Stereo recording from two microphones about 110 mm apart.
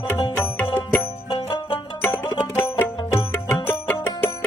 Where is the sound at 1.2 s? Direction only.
45° left (ahead or behind).